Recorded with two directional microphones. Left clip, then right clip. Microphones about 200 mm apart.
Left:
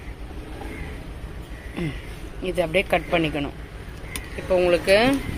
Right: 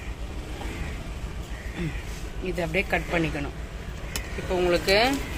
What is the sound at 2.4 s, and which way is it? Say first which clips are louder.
Speech: left 5 dB; 40° left (ahead or behind).